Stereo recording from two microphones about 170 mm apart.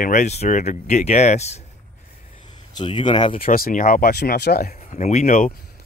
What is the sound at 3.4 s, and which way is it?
Speech, 55° left (ahead or behind).